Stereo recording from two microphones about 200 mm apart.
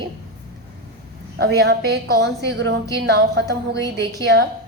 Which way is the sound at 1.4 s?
55° right (ahead or behind).